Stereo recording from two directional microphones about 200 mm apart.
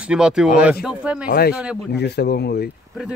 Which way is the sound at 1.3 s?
50° left (ahead or behind).